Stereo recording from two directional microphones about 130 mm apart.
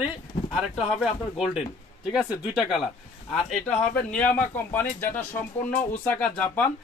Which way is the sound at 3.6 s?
10° left (ahead or behind).